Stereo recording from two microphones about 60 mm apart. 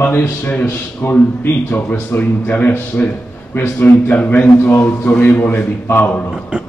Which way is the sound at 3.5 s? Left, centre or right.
Left.